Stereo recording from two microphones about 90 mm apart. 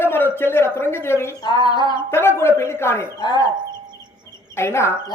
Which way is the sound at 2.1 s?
30° left (ahead or behind).